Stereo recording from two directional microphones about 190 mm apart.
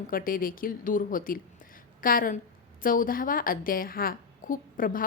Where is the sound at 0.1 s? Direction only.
45° left (ahead or behind).